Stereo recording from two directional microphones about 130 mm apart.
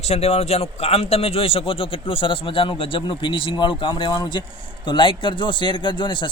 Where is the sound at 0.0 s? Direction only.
55° left (ahead or behind).